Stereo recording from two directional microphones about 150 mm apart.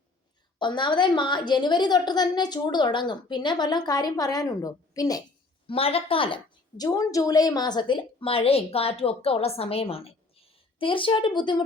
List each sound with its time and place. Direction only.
0.6 s a woman's voice: 30° left (ahead or behind)
5.6 s a woman's voice: 40° left (ahead or behind)
6.8 s a woman's voice: 20° left (ahead or behind)